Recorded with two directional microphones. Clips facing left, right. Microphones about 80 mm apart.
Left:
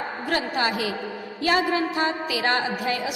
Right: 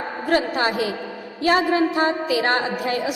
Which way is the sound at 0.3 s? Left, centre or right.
Right.